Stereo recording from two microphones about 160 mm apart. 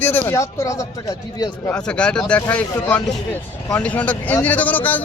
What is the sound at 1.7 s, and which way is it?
Speech, 5° left (ahead or behind).